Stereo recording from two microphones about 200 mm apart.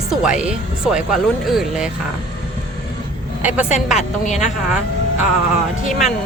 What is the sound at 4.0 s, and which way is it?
Speech, 35° left (ahead or behind).